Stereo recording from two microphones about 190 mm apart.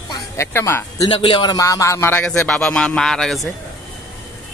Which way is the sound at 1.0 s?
30° left (ahead or behind).